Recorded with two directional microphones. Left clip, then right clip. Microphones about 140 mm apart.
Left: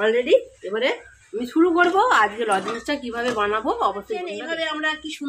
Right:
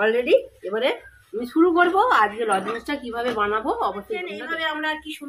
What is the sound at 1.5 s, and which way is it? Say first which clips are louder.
Speech: even; 35° left (ahead or behind).